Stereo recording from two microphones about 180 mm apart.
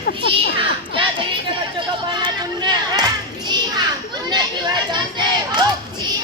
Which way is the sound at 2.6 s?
20° right (ahead or behind).